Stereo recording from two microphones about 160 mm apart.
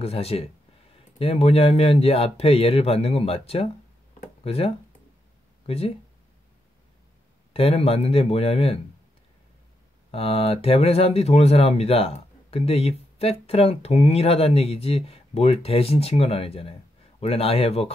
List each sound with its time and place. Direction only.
0.0 s speech: 40° left (ahead or behind)
7.5 s speech: 40° left (ahead or behind)
10.1 s speech: 40° left (ahead or behind)